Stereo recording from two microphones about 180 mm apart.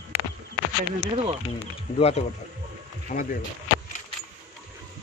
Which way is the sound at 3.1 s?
45° left (ahead or behind).